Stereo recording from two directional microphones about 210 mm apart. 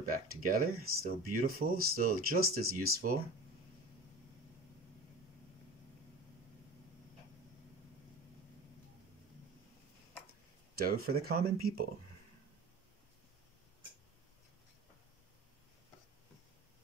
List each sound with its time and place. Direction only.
0.1 s speech: 45° right (ahead or behind)
1.6 s speech: 85° right
2.2 s speech: 45° right (ahead or behind)
10.8 s speech: 50° right (ahead or behind)